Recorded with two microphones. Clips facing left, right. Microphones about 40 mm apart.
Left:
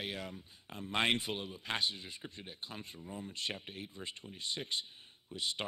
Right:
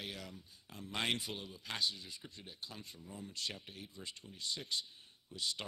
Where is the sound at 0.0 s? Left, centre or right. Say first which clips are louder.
Left 5 dB; left.